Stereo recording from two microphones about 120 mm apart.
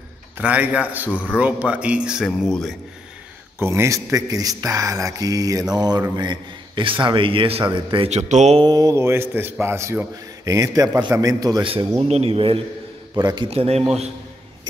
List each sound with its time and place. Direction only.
0.4 s speech: 10° right (ahead or behind)
3.5 s a man's voice: 20° right (ahead or behind); by 8.1 s 45° right (ahead or behind)
8.1 s mantra: 75° right (ahead or behind)
8.5 s a man's voice: 35° right (ahead or behind)
11.6 s speech: 50° right (ahead or behind)
13.1 s a man's voice: 35° right (ahead or behind)
13.5 s a man's voice: 60° right (ahead or behind)